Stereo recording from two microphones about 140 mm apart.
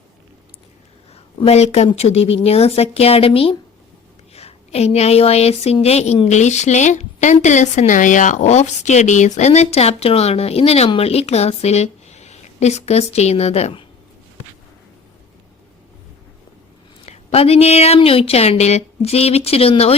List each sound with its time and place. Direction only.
1.1 s speech: 45° left (ahead or behind)
17.1 s speech: 45° left (ahead or behind)